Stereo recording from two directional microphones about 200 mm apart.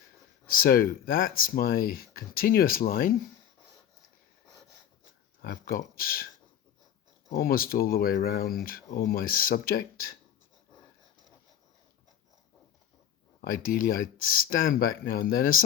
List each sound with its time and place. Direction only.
0.5 s speech: 45° left (ahead or behind)
5.4 s speech: 50° left (ahead or behind)
7.3 s speech: 50° left (ahead or behind)
13.4 s speech: 45° left (ahead or behind)